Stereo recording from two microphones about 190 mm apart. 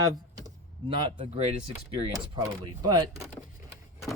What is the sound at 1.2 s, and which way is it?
Speech, 35° right (ahead or behind).